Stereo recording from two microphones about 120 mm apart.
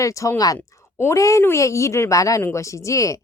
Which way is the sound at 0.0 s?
25° left (ahead or behind).